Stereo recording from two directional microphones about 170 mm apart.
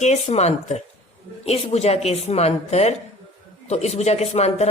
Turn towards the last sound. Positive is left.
turn(degrees=40)  # may be behind; listen again after turning